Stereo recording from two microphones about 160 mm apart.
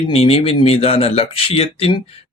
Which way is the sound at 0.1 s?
40° left (ahead or behind).